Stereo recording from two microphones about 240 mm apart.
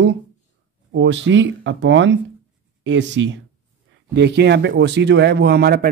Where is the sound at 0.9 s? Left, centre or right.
Right.